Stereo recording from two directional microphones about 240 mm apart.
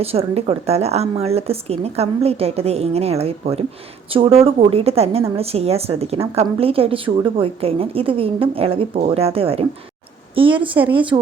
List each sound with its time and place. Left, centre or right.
0.0 s a woman's voice: right